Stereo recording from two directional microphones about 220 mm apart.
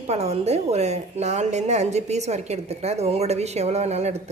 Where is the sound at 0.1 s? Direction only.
30° right (ahead or behind).